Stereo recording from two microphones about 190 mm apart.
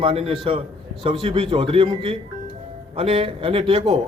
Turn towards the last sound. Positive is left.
turn(degrees=-30)  # may be behind; listen again after turning